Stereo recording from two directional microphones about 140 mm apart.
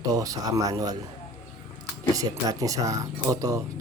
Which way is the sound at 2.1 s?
25° right (ahead or behind).